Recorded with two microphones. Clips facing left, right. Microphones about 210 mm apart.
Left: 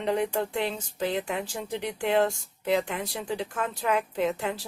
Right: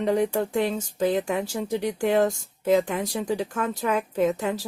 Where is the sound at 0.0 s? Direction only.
45° right (ahead or behind).